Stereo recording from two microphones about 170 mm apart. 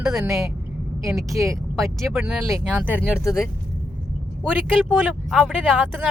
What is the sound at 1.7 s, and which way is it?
A woman's voice, centre (ahead or behind).